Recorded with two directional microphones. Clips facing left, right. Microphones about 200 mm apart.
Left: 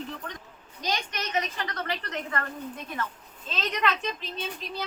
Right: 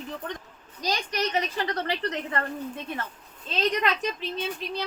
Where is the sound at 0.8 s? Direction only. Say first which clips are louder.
Right 4 dB; 35° right (ahead or behind).